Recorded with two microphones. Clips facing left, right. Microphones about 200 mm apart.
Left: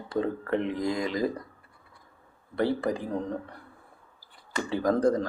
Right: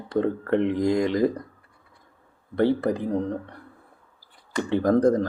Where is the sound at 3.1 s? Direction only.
35° right (ahead or behind).